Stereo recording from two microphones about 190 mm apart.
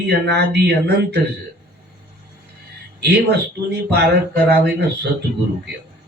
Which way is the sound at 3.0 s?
60° right (ahead or behind).